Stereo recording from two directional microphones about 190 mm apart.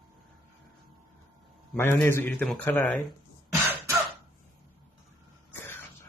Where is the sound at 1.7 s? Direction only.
15° left (ahead or behind).